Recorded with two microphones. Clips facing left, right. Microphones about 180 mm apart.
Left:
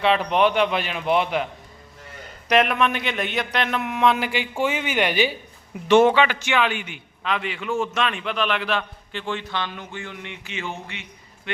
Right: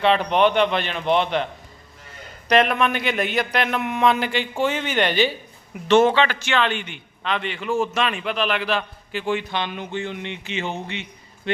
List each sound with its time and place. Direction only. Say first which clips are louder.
0.0 s a man's voice: right 1 dB; centre (ahead or behind)
2.5 s a man's voice: right 1 dB; 5° left (ahead or behind); by 11.6 s 30° right (ahead or behind)